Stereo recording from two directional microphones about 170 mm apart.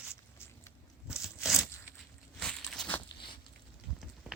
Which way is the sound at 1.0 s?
5° right (ahead or behind).